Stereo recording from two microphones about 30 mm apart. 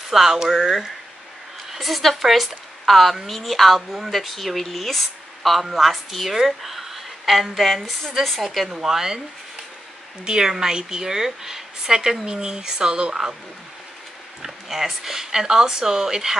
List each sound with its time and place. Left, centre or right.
0.1 s speech: centre
1.8 s a woman's voice: centre
10.2 s speech: right
14.4 s speech: centre